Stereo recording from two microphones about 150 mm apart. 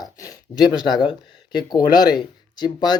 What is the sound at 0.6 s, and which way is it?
Speech, centre (ahead or behind).